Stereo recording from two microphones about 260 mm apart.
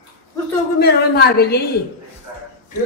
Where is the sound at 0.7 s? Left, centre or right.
Left.